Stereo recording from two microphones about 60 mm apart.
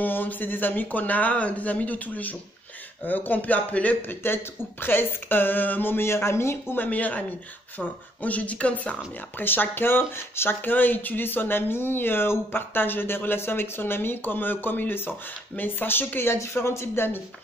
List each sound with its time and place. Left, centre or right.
0.0 s speech: left
4.2 s speech: left
6.8 s speech: left
9.4 s speech: left
16.3 s speech: left